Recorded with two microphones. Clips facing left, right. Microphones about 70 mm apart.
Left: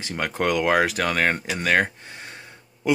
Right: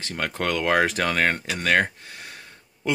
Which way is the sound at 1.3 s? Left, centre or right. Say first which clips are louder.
Even; centre.